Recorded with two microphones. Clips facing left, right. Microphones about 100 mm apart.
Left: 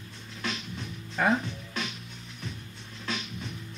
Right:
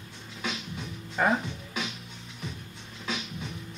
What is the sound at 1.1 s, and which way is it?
Music, 5° right (ahead or behind).